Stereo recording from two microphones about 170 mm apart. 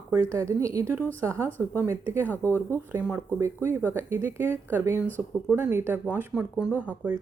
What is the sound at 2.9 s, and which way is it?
A woman's voice, 10° right (ahead or behind).